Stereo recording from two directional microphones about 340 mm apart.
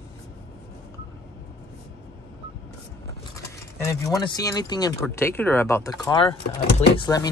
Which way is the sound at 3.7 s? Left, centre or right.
Centre.